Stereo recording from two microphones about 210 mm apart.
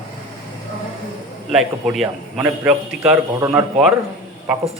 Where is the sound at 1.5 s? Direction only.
Centre (ahead or behind).